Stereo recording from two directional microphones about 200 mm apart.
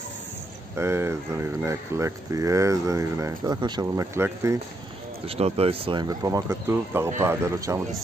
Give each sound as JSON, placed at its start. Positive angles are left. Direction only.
{"t": 0.7, "sound": "speech", "side_deg": -15}
{"t": 5.3, "sound": "speech", "side_deg": -30}